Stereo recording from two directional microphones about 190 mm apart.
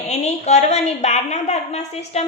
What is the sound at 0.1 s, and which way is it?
A woman's voice, 35° left (ahead or behind).